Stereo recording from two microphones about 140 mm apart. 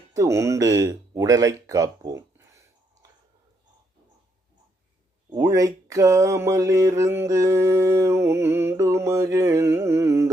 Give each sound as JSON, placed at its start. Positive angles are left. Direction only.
{"t": 0.1, "sound": "speech", "side_deg": -20}
{"t": 5.4, "sound": "speech", "side_deg": -25}